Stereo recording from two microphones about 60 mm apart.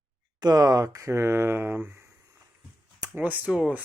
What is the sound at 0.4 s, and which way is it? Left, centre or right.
Speech, right.